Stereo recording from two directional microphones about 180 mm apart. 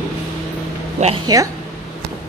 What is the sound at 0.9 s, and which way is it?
Speech, 35° right (ahead or behind).